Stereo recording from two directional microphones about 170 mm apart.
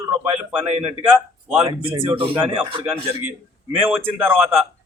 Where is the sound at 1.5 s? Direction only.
30° right (ahead or behind).